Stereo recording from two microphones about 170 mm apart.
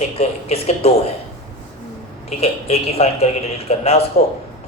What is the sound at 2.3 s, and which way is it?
Speech, 35° left (ahead or behind).